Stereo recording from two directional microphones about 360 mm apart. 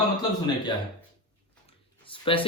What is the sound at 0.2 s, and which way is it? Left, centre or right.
Speech, centre.